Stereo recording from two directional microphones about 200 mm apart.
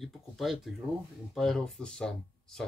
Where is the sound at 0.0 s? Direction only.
Centre (ahead or behind).